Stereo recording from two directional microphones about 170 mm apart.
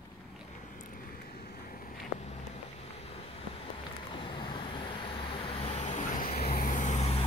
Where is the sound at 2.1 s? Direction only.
40° left (ahead or behind).